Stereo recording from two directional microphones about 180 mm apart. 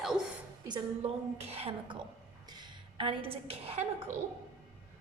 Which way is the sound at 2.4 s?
25° right (ahead or behind).